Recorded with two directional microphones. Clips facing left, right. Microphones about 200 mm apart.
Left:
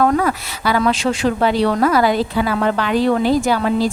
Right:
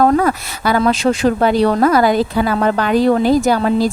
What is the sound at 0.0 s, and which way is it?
Speech, 40° right (ahead or behind).